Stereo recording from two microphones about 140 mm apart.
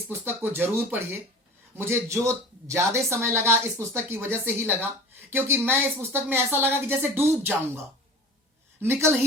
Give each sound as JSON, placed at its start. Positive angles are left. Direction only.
{"t": 0.1, "sound": "a woman's voice", "side_deg": -15}
{"t": 8.8, "sound": "a woman's voice", "side_deg": -15}